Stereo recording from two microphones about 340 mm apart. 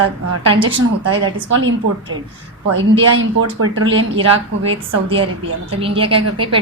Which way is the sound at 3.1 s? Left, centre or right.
Right.